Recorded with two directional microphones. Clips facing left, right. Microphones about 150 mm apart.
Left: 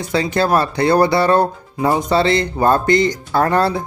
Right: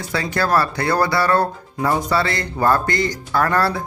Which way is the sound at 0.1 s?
20° left (ahead or behind).